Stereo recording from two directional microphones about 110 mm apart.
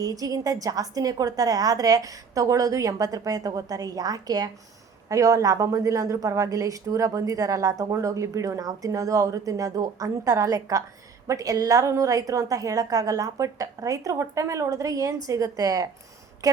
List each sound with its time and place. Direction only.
0.0 s a woman's voice: 35° right (ahead or behind)